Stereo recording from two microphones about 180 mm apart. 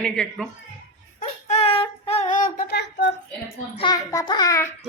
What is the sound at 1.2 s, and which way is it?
Child singing, 35° left (ahead or behind).